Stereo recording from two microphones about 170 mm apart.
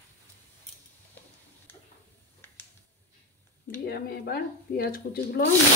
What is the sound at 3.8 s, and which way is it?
Speech, 65° left (ahead or behind).